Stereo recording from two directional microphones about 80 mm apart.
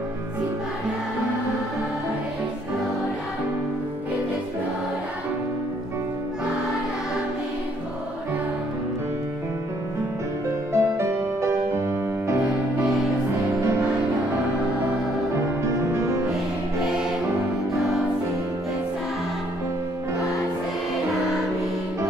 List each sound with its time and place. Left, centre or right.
10.7 s music: right
12.8 s music: centre
15.6 s music: right
16.8 s music: centre